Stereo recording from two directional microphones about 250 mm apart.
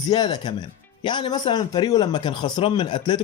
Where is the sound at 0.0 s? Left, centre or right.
Centre.